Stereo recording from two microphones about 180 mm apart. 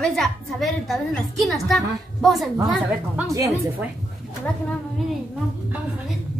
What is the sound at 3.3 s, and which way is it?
Speech, 20° right (ahead or behind).